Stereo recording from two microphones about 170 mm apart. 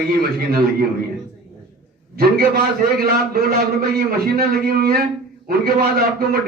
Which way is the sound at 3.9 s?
65° right (ahead or behind).